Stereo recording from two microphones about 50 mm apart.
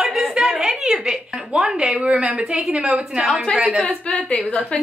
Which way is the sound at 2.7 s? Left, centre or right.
Right.